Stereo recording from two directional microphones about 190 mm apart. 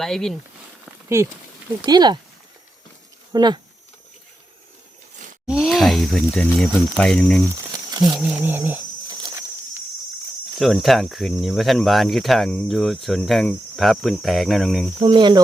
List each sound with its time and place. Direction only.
0.0 s speech: centre (ahead or behind)
1.2 s speech: 15° right (ahead or behind)
3.3 s speech: 20° right (ahead or behind)
5.5 s speech: centre (ahead or behind)
8.2 s speech: 5° right (ahead or behind)
10.6 s speech: centre (ahead or behind)
15.0 s speech: 25° right (ahead or behind)